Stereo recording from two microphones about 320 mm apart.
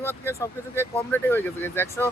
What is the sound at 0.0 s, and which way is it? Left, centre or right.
Speech, centre.